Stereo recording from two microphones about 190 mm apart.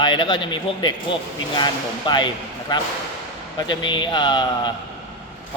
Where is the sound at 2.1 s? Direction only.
25° left (ahead or behind).